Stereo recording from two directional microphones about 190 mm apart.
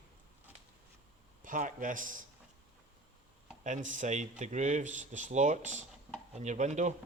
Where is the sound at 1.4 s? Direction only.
45° right (ahead or behind).